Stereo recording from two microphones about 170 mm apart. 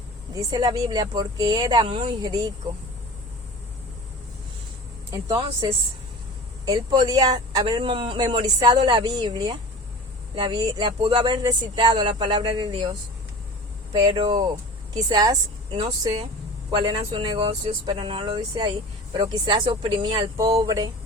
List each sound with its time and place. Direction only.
0.5 s speech: 20° right (ahead or behind)
5.1 s a man's voice: 20° right (ahead or behind)